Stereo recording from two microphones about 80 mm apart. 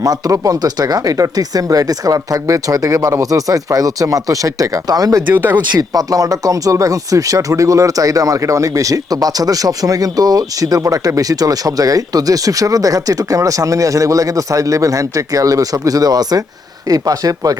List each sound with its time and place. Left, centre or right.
0.0 s speech: right
5.3 s speech: right
5.5 s speech: right